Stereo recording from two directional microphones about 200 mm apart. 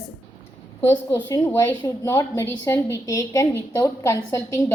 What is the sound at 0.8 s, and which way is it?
A woman's voice, 15° left (ahead or behind).